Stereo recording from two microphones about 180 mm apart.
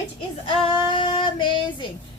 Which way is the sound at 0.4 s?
25° left (ahead or behind).